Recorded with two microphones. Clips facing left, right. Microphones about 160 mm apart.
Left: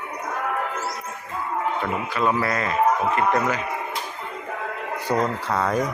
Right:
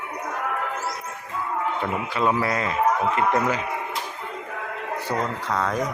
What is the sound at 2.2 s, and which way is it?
Speech, 15° right (ahead or behind).